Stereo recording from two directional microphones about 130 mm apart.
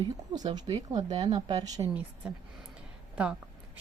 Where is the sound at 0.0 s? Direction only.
30° right (ahead or behind).